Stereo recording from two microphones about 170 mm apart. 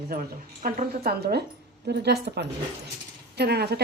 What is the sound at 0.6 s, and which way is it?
A woman's voice, 65° right (ahead or behind).